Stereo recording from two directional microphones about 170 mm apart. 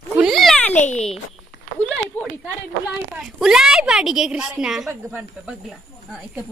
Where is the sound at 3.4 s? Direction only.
Centre (ahead or behind).